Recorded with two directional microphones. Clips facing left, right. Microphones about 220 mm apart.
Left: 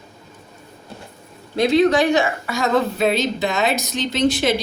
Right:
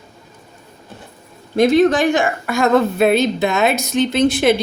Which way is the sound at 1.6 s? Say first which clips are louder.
Right 3 dB; 50° right (ahead or behind).